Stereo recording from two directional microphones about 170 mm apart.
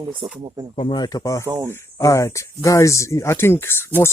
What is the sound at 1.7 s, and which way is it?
Speech, 20° left (ahead or behind).